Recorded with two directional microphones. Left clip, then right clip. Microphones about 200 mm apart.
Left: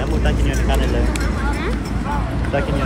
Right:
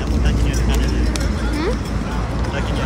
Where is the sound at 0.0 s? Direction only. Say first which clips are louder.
Left 2 dB; centre (ahead or behind).